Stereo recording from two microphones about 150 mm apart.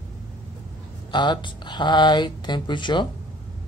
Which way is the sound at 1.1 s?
30° left (ahead or behind).